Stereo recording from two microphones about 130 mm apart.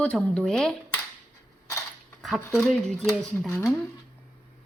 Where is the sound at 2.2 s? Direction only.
Centre (ahead or behind).